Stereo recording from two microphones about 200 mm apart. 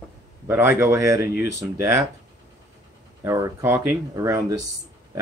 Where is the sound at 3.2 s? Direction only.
15° right (ahead or behind).